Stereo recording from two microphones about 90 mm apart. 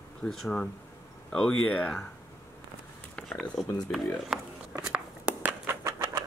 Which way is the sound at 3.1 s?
10° left (ahead or behind).